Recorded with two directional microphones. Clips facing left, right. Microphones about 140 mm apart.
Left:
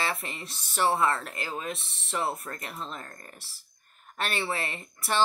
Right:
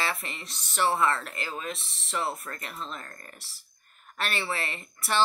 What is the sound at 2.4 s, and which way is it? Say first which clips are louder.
Speech: left 1 dB; 30° left (ahead or behind).